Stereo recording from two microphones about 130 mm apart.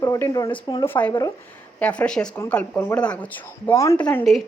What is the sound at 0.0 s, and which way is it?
Speech, 25° left (ahead or behind).